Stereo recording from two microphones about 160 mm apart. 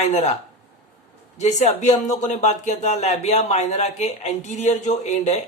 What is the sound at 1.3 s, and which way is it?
Speech, 45° left (ahead or behind).